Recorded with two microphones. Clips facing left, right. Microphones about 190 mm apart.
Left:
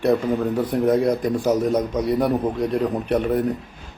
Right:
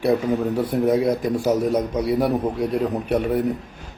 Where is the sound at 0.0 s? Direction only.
10° right (ahead or behind).